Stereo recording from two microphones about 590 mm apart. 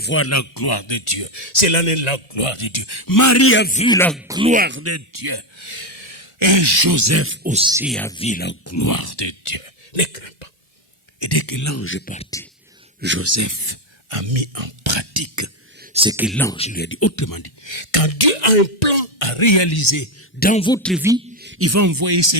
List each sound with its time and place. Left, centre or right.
0.0 s speech: left; by 6.2 s right
6.4 s speech: right; by 10.0 s left
11.2 s a man's voice: left; by 12.5 s centre
13.0 s speech: centre
14.1 s speech: right
15.8 s speech: centre; by 20.1 s left
20.4 s speech: centre
21.3 s speech: centre; by 22.4 s right